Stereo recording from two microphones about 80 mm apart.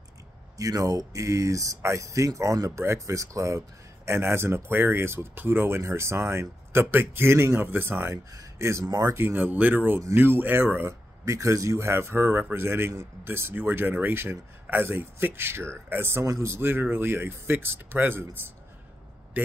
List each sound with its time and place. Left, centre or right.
0.6 s speech: right
9.1 s speech: right
11.2 s speech: right
19.4 s a sound: right